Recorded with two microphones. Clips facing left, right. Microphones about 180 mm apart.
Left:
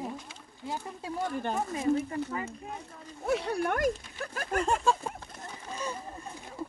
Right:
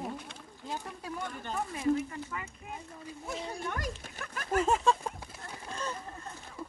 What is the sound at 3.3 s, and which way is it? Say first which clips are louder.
Speech: left 10 dB; 65° left (ahead or behind).